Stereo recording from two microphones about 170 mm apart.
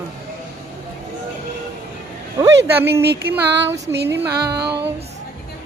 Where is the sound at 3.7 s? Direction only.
90° right.